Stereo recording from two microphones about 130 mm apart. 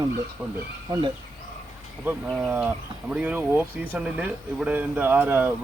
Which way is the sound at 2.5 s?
10° right (ahead or behind).